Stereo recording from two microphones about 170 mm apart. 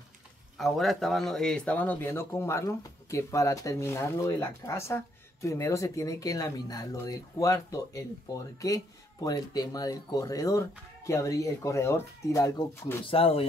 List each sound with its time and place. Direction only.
0.6 s speech: centre (ahead or behind); by 12.9 s 20° left (ahead or behind)
13.0 s speech: 35° left (ahead or behind)